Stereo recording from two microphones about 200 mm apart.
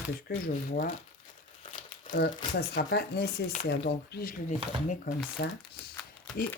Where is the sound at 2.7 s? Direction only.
50° left (ahead or behind).